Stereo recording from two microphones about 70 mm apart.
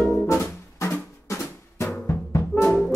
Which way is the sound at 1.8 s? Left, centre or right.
Left.